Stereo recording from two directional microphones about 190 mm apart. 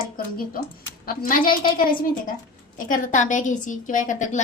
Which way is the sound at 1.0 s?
50° left (ahead or behind).